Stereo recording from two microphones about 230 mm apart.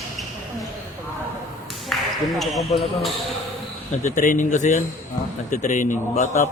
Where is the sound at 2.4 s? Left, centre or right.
Centre.